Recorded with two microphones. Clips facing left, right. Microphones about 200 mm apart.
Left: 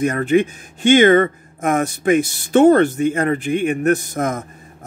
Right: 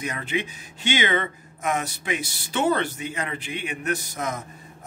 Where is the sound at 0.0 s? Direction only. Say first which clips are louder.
Left 13 dB; 50° left (ahead or behind).